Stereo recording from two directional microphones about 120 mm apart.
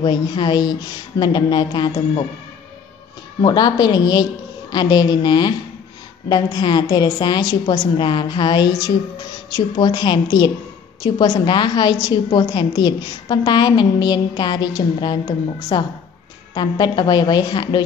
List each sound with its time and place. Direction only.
0.0 s a woman's voice: 40° left (ahead or behind)
3.3 s a woman's voice: 35° left (ahead or behind)